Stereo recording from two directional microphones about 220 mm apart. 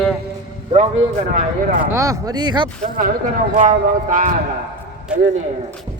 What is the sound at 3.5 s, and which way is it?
Speech, 35° right (ahead or behind).